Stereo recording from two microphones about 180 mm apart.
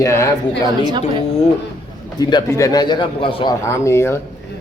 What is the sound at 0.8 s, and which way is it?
Speech, 25° right (ahead or behind).